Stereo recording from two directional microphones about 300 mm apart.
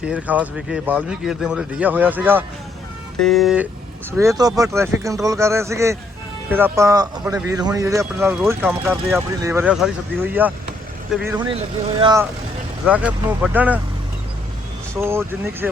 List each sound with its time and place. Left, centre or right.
0.0 s speech: centre
11.3 s speech: centre
14.9 s speech: centre